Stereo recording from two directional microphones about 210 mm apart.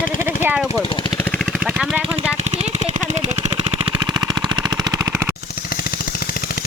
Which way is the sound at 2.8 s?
35° right (ahead or behind).